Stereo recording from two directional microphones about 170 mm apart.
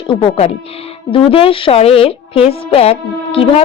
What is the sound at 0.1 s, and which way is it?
Speech, 35° left (ahead or behind).